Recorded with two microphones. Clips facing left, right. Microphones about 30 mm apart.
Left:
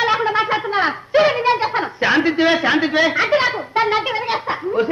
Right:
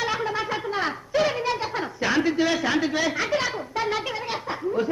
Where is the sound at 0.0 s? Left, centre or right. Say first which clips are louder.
Left 9 dB; left.